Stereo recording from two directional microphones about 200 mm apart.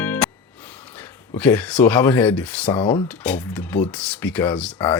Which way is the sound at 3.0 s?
5° left (ahead or behind).